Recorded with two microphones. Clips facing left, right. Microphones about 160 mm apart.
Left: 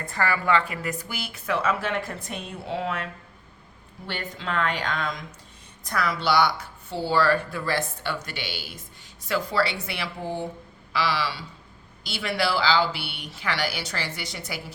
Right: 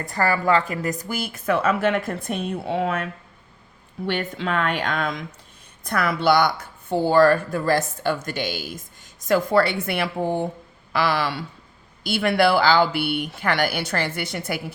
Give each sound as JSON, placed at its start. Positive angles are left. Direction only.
{"t": 0.1, "sound": "speech", "side_deg": -40}
{"t": 4.0, "sound": "speech", "side_deg": -60}